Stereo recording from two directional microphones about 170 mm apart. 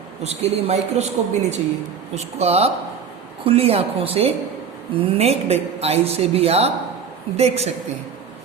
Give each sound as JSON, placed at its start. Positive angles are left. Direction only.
{"t": 0.2, "sound": "a woman's voice", "side_deg": -40}